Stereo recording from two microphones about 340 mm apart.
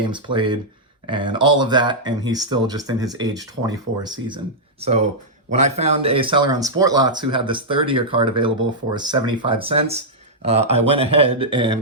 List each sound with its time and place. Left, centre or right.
0.0 s speech: centre